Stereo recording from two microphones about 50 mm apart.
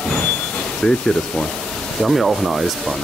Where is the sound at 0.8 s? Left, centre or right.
Centre.